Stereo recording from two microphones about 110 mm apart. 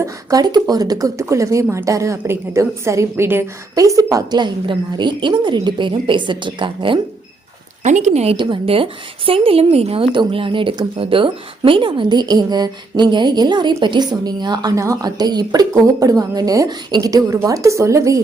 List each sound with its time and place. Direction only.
0.0 s a woman's voice: 35° right (ahead or behind)
3.8 s a woman's voice: 30° right (ahead or behind); by 7.0 s 50° right (ahead or behind)
7.9 s speech: 90° right
8.4 s a woman's voice: 55° right (ahead or behind); by 18.2 s 25° right (ahead or behind)